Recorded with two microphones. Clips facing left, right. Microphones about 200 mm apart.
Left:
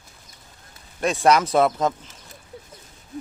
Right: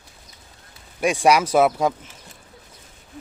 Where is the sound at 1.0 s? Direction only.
15° right (ahead or behind).